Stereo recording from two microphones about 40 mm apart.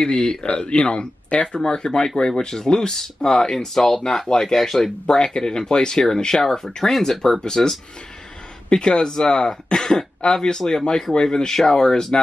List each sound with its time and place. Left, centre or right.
0.0 s speech: left
5.0 s speech: centre